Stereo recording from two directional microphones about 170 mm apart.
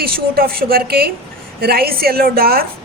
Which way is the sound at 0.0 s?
60° right (ahead or behind).